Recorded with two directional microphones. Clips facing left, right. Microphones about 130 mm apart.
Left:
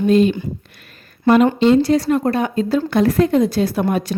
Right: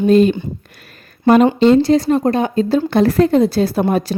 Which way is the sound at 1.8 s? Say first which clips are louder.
Right 2 dB; 25° right (ahead or behind).